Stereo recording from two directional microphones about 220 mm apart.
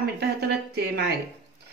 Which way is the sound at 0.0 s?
45° right (ahead or behind).